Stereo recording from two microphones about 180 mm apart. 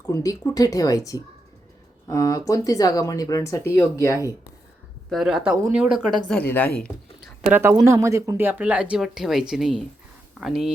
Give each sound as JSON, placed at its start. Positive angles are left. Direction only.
{"t": 0.1, "sound": "speech", "side_deg": 20}
{"t": 5.0, "sound": "speech", "side_deg": 0}
{"t": 6.5, "sound": "speech", "side_deg": 10}
{"t": 7.5, "sound": "speech", "side_deg": -15}